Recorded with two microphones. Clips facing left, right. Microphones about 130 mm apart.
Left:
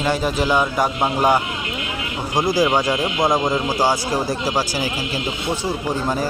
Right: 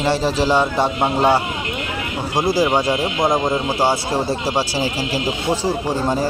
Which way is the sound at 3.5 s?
25° right (ahead or behind).